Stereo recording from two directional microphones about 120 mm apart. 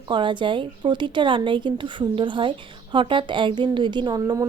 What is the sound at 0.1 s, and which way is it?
A woman's voice, 40° right (ahead or behind).